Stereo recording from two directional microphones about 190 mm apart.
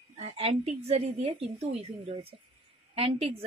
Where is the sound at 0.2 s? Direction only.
35° right (ahead or behind).